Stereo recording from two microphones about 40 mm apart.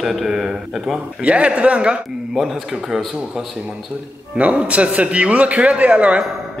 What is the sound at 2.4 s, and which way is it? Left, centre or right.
Speech, centre.